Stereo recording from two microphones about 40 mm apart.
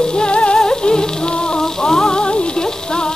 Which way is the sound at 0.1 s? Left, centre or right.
Left.